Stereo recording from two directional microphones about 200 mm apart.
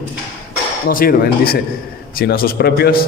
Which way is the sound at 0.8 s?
45° left (ahead or behind).